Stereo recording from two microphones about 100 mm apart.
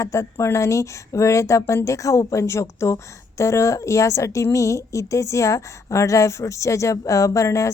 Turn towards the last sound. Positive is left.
turn(degrees=30)  # may be behind; listen again after turning